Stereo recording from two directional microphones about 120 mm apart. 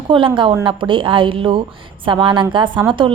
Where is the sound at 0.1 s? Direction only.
45° right (ahead or behind).